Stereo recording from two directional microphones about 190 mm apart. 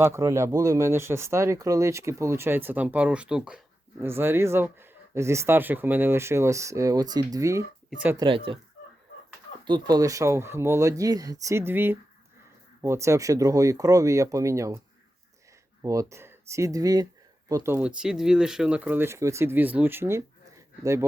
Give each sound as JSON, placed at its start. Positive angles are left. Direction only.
{"t": 0.0, "sound": "speech", "side_deg": -15}
{"t": 8.1, "sound": "speech", "side_deg": -25}
{"t": 9.6, "sound": "speech", "side_deg": -20}
{"t": 15.8, "sound": "speech", "side_deg": -15}